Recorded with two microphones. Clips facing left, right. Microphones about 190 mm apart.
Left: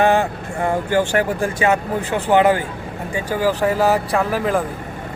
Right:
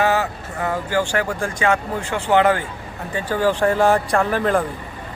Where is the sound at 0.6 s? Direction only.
25° left (ahead or behind).